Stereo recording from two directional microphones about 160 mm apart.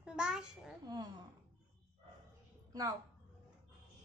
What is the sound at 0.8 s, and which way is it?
Speech, 25° right (ahead or behind).